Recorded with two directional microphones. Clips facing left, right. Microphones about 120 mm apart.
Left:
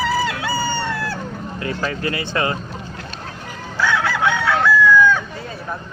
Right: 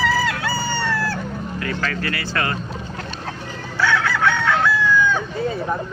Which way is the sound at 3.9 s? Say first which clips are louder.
Left 1 dB; 20° left (ahead or behind).